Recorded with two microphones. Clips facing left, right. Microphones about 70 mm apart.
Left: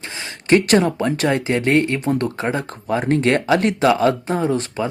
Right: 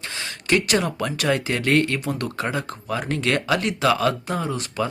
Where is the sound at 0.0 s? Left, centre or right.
Left.